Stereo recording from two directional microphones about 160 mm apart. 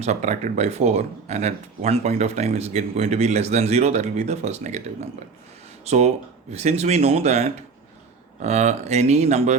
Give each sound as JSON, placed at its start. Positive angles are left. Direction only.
{"t": 0.0, "sound": "speech", "side_deg": -45}